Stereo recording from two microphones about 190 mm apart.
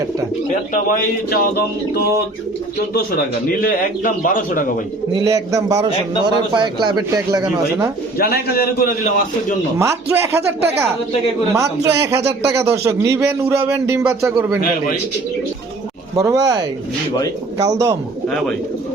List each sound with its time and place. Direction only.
0.7 s a man's voice: 50° left (ahead or behind)
5.1 s a man's voice: 15° right (ahead or behind)
8.2 s a man's voice: 55° left (ahead or behind)
9.7 s speech: 15° right (ahead or behind)
16.1 s speech: 15° right (ahead or behind)
18.3 s speech: centre (ahead or behind)